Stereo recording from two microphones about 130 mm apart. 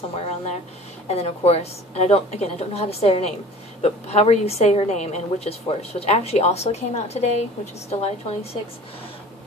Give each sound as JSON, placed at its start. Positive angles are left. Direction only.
{"t": 0.1, "sound": "a woman's voice", "side_deg": 50}